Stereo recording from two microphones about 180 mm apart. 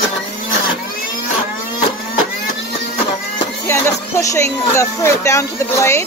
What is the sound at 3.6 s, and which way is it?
Speech, 15° left (ahead or behind).